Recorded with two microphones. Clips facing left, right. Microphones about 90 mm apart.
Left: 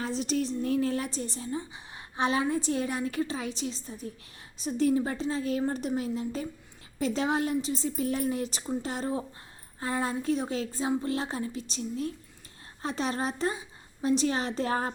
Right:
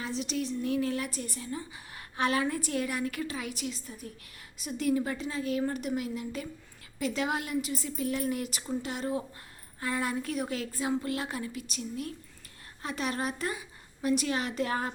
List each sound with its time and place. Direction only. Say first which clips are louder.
0.0 s a woman's voice: left 4 dB; 35° left (ahead or behind)